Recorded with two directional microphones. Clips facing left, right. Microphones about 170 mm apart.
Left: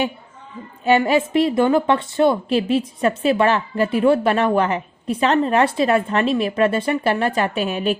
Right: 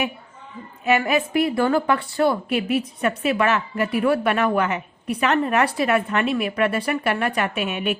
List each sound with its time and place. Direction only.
0.9 s a woman's voice: 30° left (ahead or behind)